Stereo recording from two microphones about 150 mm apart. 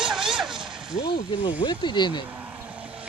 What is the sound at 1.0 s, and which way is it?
Speech, 30° left (ahead or behind).